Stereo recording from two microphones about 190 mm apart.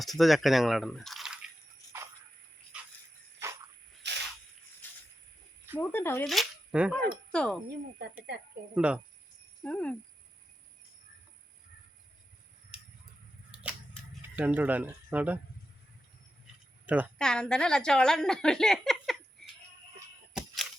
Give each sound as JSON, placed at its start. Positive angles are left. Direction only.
{"t": 0.0, "sound": "a woman's voice", "side_deg": 0}
{"t": 4.0, "sound": "a sound", "side_deg": -65}
{"t": 4.8, "sound": "a sound", "side_deg": 10}
{"t": 5.8, "sound": "speech", "side_deg": 10}
{"t": 6.2, "sound": "speech", "side_deg": 0}
{"t": 8.3, "sound": "speech", "side_deg": -60}
{"t": 8.7, "sound": "a woman's voice", "side_deg": -5}
{"t": 9.6, "sound": "speech", "side_deg": 5}
{"t": 13.5, "sound": "scissors", "side_deg": -5}
{"t": 16.8, "sound": "a woman's voice", "side_deg": -10}
{"t": 17.2, "sound": "a woman's voice", "side_deg": 5}